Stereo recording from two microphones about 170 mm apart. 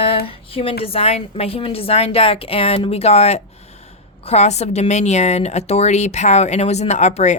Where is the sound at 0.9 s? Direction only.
35° left (ahead or behind).